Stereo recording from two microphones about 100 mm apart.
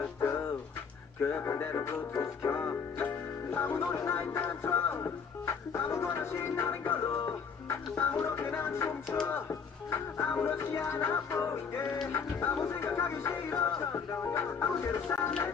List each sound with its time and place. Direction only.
0.2 s a sound: 25° left (ahead or behind)
1.2 s music: 25° left (ahead or behind)
8.2 s music: 25° left (ahead or behind)
12.6 s music: 30° left (ahead or behind)